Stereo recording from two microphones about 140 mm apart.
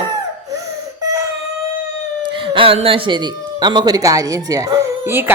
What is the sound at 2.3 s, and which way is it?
A woman's voice, 40° right (ahead or behind).